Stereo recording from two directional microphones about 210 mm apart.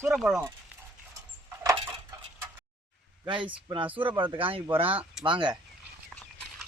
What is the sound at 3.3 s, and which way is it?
Speech, 25° right (ahead or behind).